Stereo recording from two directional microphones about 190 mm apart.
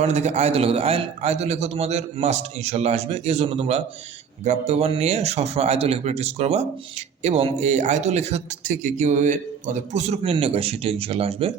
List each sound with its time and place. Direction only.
0.0 s speech: 35° right (ahead or behind)